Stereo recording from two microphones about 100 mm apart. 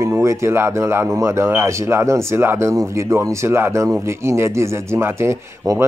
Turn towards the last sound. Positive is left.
turn(degrees=-25)  # may be behind; listen again after turning